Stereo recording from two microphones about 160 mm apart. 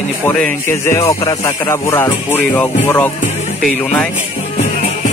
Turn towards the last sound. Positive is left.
turn(degrees=5)  # may be behind; listen again after turning